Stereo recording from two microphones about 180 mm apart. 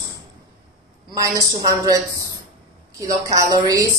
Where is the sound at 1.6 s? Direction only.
20° right (ahead or behind).